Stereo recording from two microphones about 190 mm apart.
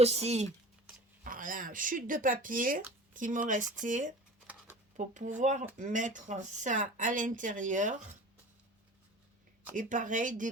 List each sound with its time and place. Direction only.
0.0 s speech: 35° right (ahead or behind)
1.2 s speech: 45° right (ahead or behind)
9.7 s speech: 45° right (ahead or behind)